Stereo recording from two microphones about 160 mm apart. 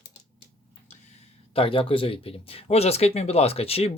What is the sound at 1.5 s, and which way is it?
Speech, 35° left (ahead or behind).